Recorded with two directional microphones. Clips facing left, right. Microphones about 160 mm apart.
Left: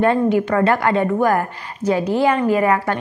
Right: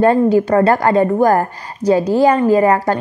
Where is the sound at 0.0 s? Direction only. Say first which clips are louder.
Right 4 dB; 35° right (ahead or behind).